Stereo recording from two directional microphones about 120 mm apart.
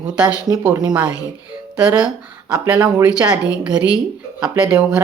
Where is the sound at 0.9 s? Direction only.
10° right (ahead or behind).